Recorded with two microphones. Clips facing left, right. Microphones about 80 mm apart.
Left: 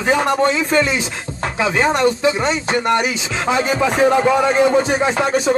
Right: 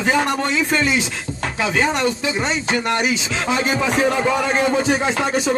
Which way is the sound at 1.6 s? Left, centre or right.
Left.